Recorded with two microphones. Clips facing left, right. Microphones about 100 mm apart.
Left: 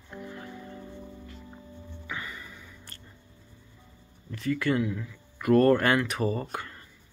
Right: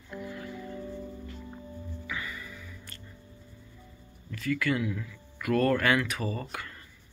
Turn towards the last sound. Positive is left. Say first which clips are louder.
# left 5 dB
turn(degrees=30)  # may be behind; listen again after turning